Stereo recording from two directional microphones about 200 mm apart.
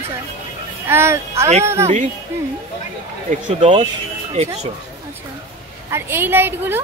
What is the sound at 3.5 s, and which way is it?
Speech, 35° right (ahead or behind).